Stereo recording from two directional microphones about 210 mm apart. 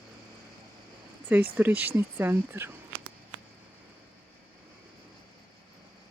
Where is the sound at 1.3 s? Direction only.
10° right (ahead or behind).